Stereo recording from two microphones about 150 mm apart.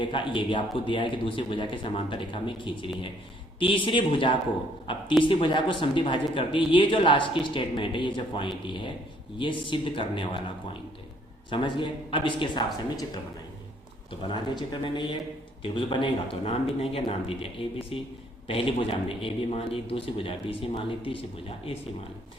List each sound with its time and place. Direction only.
0.0 s a man's voice: 35° left (ahead or behind)
11.5 s a man's voice: 30° left (ahead or behind)
14.1 s a man's voice: 30° left (ahead or behind)